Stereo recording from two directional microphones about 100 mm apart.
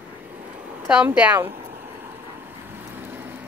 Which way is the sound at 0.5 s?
15° right (ahead or behind).